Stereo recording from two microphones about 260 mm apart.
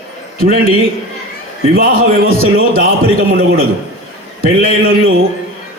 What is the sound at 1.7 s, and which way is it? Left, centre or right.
A man's voice, right.